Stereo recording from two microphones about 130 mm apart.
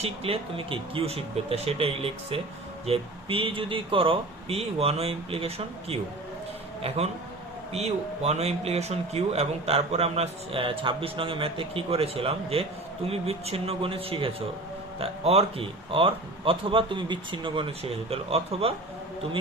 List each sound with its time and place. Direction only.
0.0 s speech: 45° right (ahead or behind)